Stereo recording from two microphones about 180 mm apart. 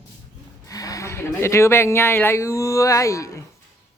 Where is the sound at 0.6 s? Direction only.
20° left (ahead or behind).